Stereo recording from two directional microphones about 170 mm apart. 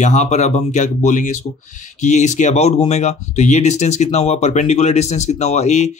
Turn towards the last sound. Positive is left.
turn(degrees=40)  # may be behind; listen again after turning